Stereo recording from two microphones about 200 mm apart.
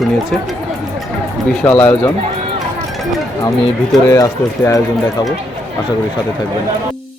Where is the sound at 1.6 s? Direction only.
10° left (ahead or behind).